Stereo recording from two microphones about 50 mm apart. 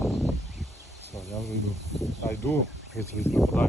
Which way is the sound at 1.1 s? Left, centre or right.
Centre.